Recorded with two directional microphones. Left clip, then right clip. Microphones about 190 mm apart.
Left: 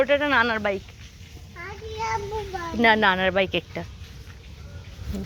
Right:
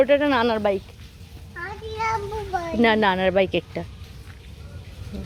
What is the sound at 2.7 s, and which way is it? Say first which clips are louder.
Speech: left 1 dB; 15° right (ahead or behind).